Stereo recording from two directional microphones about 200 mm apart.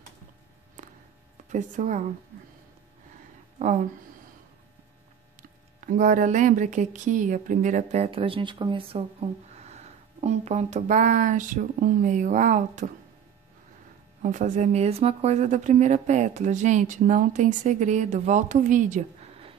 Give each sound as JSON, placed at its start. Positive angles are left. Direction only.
{"t": 0.8, "sound": "a sound", "side_deg": -35}
{"t": 1.5, "sound": "speech", "side_deg": -35}
{"t": 3.5, "sound": "speech", "side_deg": -40}
{"t": 5.9, "sound": "speech", "side_deg": -40}
{"t": 14.2, "sound": "speech", "side_deg": -40}